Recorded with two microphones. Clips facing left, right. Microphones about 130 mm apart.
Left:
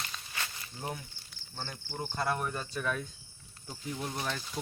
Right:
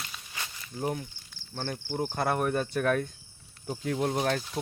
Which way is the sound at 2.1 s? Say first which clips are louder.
Right 5 dB; 60° right (ahead or behind).